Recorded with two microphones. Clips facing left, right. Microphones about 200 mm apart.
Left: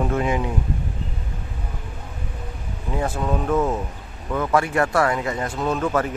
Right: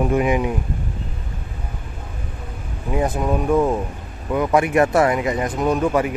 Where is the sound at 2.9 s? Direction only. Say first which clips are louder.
Right 4 dB; 15° right (ahead or behind).